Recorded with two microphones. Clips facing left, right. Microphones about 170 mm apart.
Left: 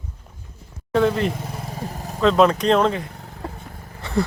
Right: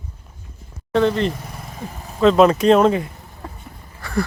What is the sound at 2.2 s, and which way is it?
Speech, 5° right (ahead or behind).